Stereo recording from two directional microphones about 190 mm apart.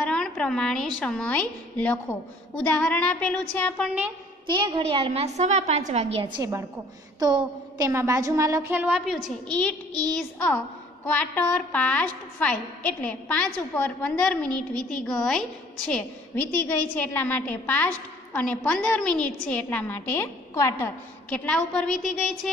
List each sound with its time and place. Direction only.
0.1 s a woman's voice: 5° left (ahead or behind)
4.5 s a woman's voice: 25° right (ahead or behind); by 22.5 s centre (ahead or behind)